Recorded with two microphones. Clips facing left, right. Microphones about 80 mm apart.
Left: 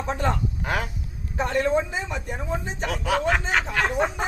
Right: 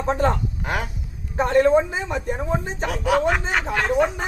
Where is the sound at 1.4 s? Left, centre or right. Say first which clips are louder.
Right 6 dB; right; by 3.8 s centre.